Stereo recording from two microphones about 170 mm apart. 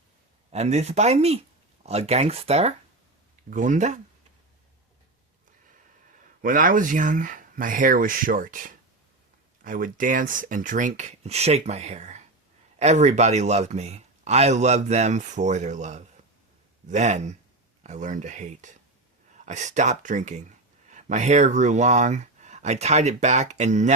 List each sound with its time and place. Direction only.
0.5 s speech: 40° right (ahead or behind)
3.5 s speech: 50° right (ahead or behind)
6.4 s speech: 55° right (ahead or behind)